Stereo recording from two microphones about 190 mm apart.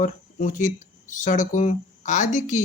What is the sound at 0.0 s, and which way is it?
Speech, 45° left (ahead or behind).